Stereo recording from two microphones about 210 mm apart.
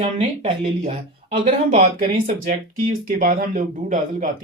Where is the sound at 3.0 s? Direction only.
40° right (ahead or behind).